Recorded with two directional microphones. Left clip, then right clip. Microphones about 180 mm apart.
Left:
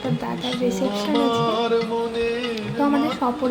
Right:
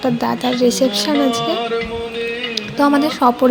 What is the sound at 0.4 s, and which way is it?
Speech, 30° right (ahead or behind).